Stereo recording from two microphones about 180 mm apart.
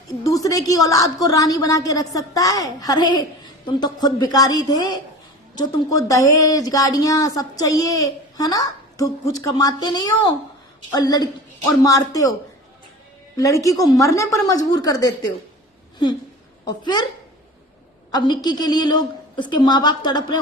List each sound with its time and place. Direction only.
0.3 s speech: 20° left (ahead or behind)
13.3 s speech: 20° left (ahead or behind)
16.6 s speech: 25° left (ahead or behind)
18.1 s speech: 25° left (ahead or behind)